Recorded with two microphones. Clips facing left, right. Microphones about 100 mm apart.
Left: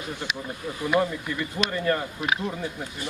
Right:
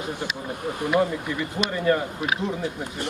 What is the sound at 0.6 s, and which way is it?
Speech, 55° right (ahead or behind).